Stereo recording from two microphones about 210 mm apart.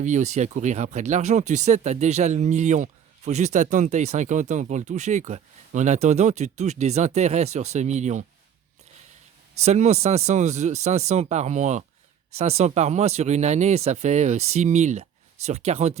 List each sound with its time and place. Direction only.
0.0 s speech: 35° right (ahead or behind)
9.6 s speech: 30° right (ahead or behind)